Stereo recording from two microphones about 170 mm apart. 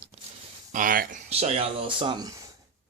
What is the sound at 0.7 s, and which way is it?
Speech, 55° right (ahead or behind).